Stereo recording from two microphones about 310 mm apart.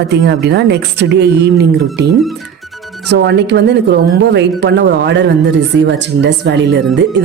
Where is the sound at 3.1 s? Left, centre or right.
Right.